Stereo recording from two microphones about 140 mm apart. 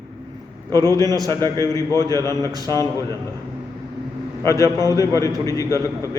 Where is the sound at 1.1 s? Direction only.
30° right (ahead or behind).